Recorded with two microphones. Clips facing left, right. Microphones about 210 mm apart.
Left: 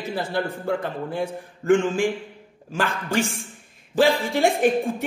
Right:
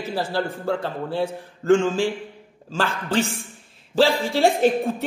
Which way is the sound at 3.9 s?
55° left (ahead or behind).